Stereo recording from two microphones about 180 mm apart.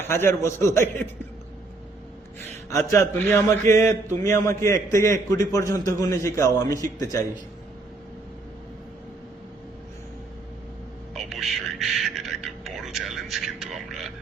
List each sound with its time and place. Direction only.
0.0 s a man's voice: 15° left (ahead or behind)
2.6 s a man's voice: 15° left (ahead or behind)
11.1 s music: centre (ahead or behind)
12.8 s a sound: centre (ahead or behind)